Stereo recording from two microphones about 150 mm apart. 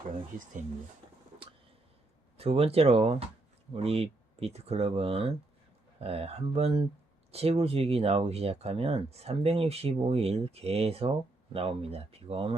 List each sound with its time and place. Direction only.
2.4 s speech: 40° right (ahead or behind)